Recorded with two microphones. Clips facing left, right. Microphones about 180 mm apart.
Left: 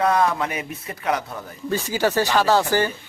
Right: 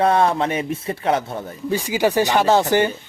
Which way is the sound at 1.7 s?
15° right (ahead or behind).